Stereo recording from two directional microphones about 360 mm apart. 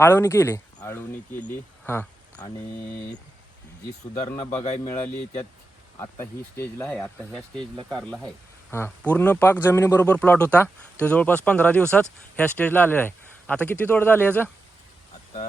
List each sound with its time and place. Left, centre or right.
0.0 s speech: centre
1.8 s a sound: centre
4.1 s speech: centre
6.0 s speech: centre